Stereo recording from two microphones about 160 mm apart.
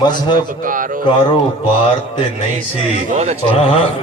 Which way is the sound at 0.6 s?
60° right (ahead or behind).